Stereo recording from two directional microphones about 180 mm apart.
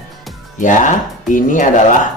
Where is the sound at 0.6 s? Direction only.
45° left (ahead or behind).